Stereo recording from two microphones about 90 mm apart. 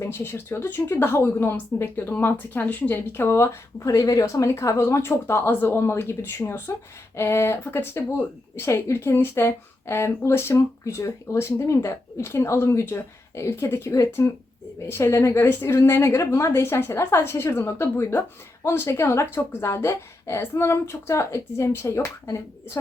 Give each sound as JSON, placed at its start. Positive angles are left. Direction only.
{"t": 0.0, "sound": "a woman's voice", "side_deg": 25}